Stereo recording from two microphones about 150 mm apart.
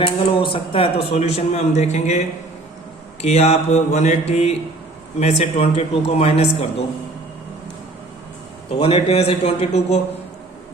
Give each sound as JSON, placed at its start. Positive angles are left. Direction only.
{"t": 0.0, "sound": "a man's voice", "side_deg": 35}
{"t": 8.8, "sound": "a man's voice", "side_deg": 40}